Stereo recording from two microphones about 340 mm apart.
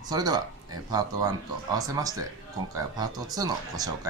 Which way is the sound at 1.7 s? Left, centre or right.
Centre.